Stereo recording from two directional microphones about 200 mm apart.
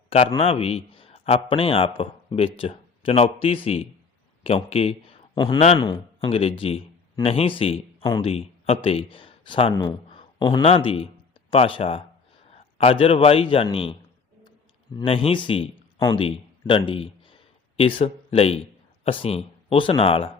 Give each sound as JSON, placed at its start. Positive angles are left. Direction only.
{"t": 0.3, "sound": "a man's voice", "side_deg": 25}
{"t": 14.9, "sound": "a man's voice", "side_deg": 25}